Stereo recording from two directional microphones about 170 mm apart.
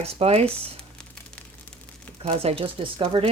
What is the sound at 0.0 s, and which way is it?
Speech, 35° right (ahead or behind).